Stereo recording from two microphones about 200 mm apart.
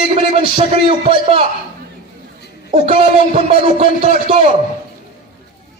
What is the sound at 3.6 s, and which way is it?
Speech, 30° right (ahead or behind).